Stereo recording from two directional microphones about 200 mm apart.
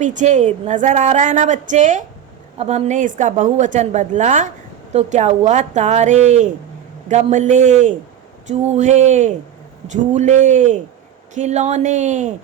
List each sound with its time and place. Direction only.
0.0 s a woman's voice: 40° right (ahead or behind)